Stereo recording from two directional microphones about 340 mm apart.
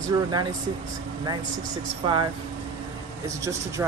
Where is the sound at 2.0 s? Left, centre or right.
Centre.